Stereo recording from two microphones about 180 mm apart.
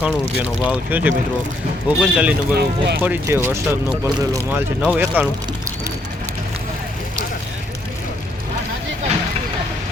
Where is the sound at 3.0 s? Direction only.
10° right (ahead or behind).